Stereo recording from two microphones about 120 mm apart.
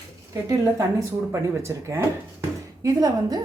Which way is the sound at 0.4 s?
25° right (ahead or behind).